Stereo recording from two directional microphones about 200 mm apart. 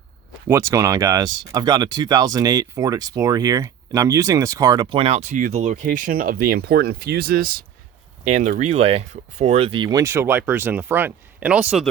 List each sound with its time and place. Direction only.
0.4 s speech: 15° right (ahead or behind)